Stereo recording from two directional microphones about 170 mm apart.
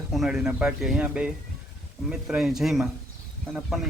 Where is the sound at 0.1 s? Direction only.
Centre (ahead or behind).